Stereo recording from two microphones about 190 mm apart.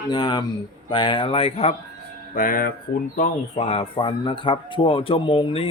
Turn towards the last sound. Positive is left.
turn(degrees=30)  # may be behind; listen again after turning